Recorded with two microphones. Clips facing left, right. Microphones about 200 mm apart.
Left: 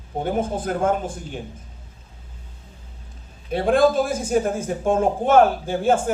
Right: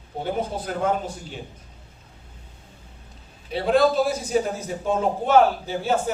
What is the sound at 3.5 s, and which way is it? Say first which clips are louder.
A man's voice: left 2 dB; 50° left (ahead or behind).